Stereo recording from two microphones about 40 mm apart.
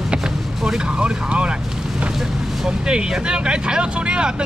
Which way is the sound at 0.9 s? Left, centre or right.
Right.